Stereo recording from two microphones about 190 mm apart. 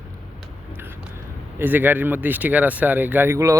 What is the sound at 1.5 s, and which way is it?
Speech, 10° right (ahead or behind).